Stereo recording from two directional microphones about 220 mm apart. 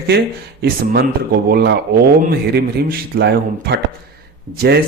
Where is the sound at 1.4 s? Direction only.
45° right (ahead or behind).